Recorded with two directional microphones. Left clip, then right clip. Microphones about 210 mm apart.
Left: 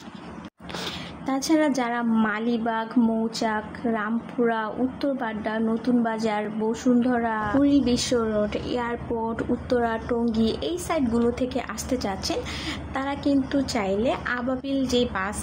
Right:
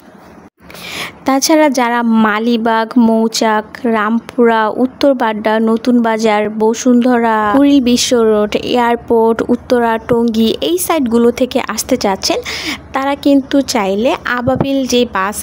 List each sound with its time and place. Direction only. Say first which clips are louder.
1.2 s a woman's voice: right 13 dB; 45° right (ahead or behind)